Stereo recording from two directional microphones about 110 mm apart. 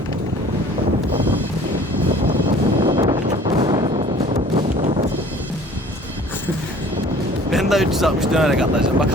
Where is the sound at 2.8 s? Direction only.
50° right (ahead or behind).